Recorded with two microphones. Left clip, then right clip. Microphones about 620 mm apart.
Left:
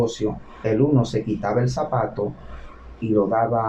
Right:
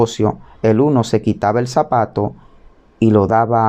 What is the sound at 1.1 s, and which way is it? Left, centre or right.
Speech, right.